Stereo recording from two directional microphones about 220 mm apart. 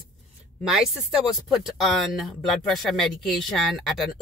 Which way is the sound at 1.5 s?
Centre (ahead or behind).